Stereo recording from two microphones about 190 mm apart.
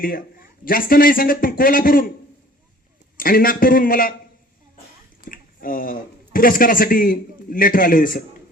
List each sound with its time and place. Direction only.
0.0 s a man's voice: 50° left (ahead or behind)
3.2 s a man's voice: 50° left (ahead or behind)
5.2 s speech: 45° left (ahead or behind)